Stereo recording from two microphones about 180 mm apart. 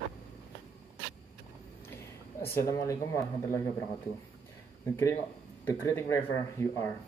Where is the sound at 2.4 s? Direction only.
15° left (ahead or behind).